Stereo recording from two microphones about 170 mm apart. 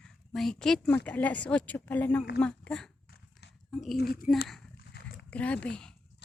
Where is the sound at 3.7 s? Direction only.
Centre (ahead or behind).